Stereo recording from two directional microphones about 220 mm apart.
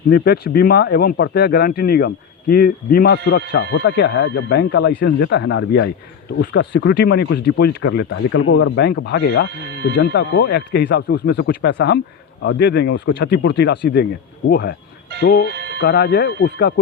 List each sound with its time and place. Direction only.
0.1 s speech: 45° left (ahead or behind)
15.4 s a sound: 50° right (ahead or behind)
15.8 s speech: 45° left (ahead or behind)